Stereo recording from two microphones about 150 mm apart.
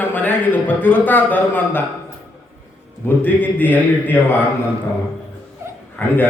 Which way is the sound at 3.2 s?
10° left (ahead or behind).